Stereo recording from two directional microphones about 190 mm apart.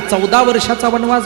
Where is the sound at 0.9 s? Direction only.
20° right (ahead or behind).